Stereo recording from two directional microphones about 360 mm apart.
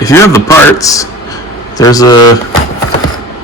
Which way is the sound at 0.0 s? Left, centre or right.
Centre.